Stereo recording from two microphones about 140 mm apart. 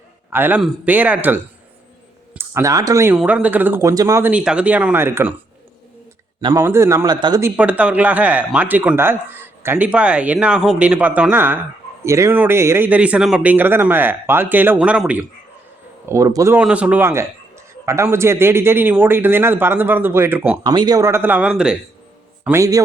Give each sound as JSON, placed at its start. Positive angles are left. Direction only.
{"t": 0.3, "sound": "a man's voice", "side_deg": -15}
{"t": 3.2, "sound": "speech", "side_deg": -10}
{"t": 4.3, "sound": "speech", "side_deg": -5}
{"t": 6.5, "sound": "speech", "side_deg": -20}
{"t": 7.4, "sound": "speech", "side_deg": -10}
{"t": 16.0, "sound": "speech", "side_deg": -25}
{"t": 16.6, "sound": "speech", "side_deg": -10}
{"t": 20.7, "sound": "speech", "side_deg": -30}
{"t": 22.4, "sound": "speech", "side_deg": -20}